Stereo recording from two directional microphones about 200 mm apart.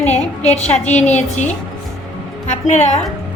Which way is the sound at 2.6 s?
35° left (ahead or behind).